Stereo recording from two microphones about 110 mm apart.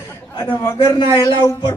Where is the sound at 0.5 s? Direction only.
35° left (ahead or behind).